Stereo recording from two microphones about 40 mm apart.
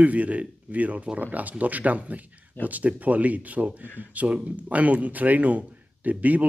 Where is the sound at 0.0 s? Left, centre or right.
Right.